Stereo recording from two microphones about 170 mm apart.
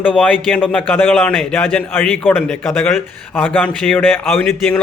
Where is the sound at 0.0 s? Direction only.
10° left (ahead or behind).